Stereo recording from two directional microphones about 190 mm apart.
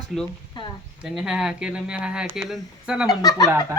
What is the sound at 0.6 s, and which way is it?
Speech, 25° left (ahead or behind).